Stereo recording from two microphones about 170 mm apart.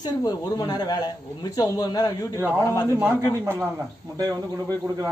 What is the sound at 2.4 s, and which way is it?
Speech, 15° right (ahead or behind).